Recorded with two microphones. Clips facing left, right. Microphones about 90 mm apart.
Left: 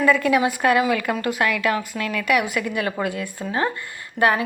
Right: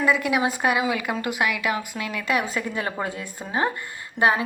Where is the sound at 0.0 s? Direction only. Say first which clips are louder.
Left 4 dB; 15° right (ahead or behind).